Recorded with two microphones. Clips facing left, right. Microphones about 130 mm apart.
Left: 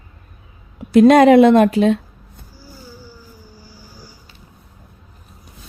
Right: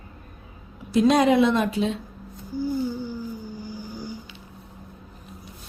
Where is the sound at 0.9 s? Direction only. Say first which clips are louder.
Left 9 dB; 60° left (ahead or behind).